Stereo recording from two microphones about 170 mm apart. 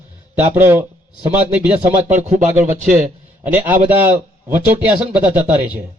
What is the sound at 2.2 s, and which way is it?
Speech, 45° right (ahead or behind).